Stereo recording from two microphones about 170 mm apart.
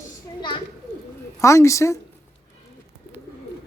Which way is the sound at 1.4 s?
15° left (ahead or behind).